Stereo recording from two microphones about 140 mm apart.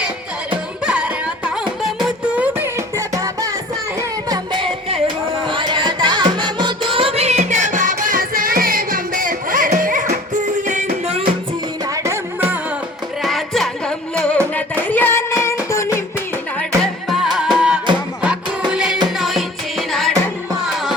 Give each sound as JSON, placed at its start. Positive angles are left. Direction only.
{"t": 0.9, "sound": "music", "side_deg": -5}
{"t": 4.3, "sound": "music", "side_deg": -35}
{"t": 12.0, "sound": "music", "side_deg": -15}
{"t": 13.2, "sound": "music", "side_deg": 0}
{"t": 14.5, "sound": "a sound", "side_deg": 10}
{"t": 16.6, "sound": "music", "side_deg": 0}